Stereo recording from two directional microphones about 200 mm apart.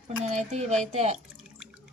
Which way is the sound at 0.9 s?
35° right (ahead or behind).